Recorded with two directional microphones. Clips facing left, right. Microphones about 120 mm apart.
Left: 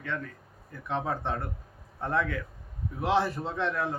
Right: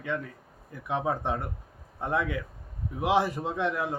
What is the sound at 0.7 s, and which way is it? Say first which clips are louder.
Speech: right 2 dB; 15° right (ahead or behind).